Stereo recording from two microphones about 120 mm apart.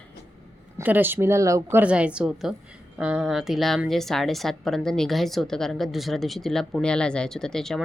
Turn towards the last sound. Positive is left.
turn(degrees=5)  # may be behind; listen again after turning